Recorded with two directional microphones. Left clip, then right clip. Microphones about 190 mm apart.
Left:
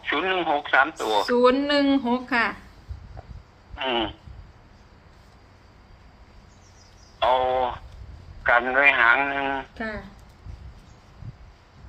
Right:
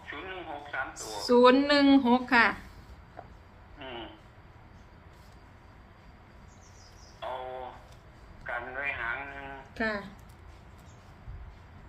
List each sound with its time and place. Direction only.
0.0 s speech: 60° left (ahead or behind)
1.2 s speech: 5° left (ahead or behind)
3.8 s a man's voice: 60° left (ahead or behind)
7.2 s a man's voice: 65° left (ahead or behind)
9.7 s speech: centre (ahead or behind)